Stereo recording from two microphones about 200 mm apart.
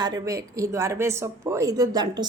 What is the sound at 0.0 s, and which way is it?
A woman's voice, 20° right (ahead or behind).